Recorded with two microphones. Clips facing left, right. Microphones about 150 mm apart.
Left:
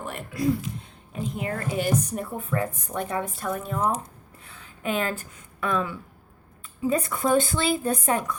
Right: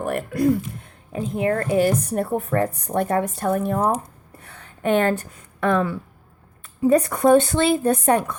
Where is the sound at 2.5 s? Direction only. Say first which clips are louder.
Right 6 dB; 45° right (ahead or behind); by 5.8 s 65° right (ahead or behind).